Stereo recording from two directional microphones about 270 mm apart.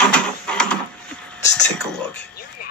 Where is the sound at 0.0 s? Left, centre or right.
Centre.